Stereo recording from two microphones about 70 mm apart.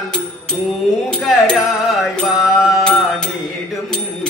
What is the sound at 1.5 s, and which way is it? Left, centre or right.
Music, centre.